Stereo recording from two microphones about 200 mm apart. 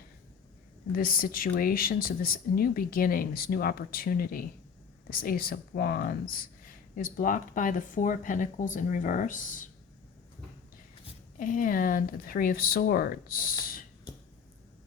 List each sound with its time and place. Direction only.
0.9 s speech: 45° left (ahead or behind)
11.3 s speech: 40° left (ahead or behind)